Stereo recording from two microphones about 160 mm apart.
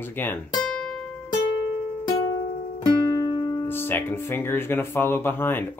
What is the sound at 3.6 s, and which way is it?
Speech, 15° left (ahead or behind).